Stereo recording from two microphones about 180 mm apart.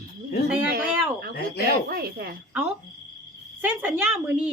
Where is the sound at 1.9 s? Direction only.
55° right (ahead or behind).